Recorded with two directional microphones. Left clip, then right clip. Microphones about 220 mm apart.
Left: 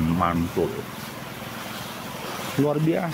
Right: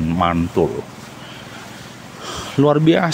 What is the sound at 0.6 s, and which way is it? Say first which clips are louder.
Speech: right 8 dB; 25° right (ahead or behind).